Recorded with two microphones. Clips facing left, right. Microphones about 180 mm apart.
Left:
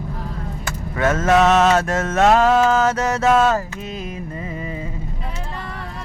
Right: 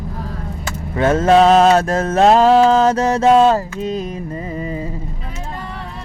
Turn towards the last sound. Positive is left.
turn(degrees=-35)  # may be behind; listen again after turning